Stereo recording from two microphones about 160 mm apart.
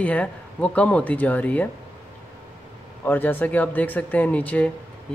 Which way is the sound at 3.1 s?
10° left (ahead or behind).